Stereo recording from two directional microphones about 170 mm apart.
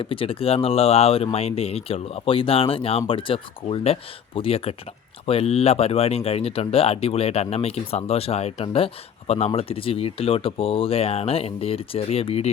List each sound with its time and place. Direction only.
0.0 s speech: 30° left (ahead or behind)